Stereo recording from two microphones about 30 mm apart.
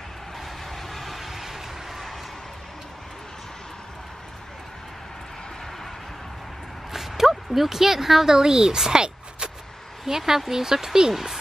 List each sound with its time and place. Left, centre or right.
0.8 s vehicle: centre
6.9 s a sound: centre
8.4 s speech: right
10.0 s speech: centre